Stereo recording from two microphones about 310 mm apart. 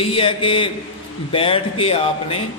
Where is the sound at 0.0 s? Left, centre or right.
Centre.